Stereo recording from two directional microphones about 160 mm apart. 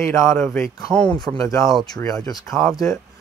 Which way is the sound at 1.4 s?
20° left (ahead or behind).